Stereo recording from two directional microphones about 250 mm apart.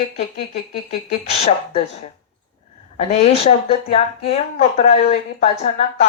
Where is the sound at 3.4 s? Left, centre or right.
Left.